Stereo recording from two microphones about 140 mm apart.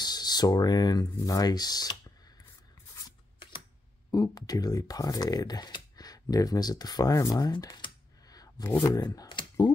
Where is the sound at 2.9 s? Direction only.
25° left (ahead or behind).